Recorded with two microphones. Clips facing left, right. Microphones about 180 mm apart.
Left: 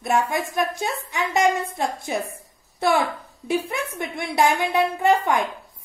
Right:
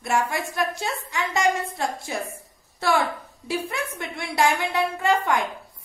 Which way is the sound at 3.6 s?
20° left (ahead or behind).